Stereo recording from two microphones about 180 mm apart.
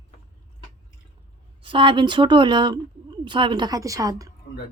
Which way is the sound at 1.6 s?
30° right (ahead or behind).